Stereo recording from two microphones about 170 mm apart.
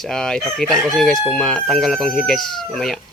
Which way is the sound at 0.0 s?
5° left (ahead or behind).